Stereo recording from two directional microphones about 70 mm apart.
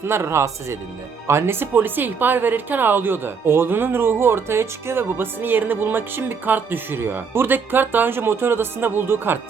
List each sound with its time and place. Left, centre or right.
0.0 s speech: right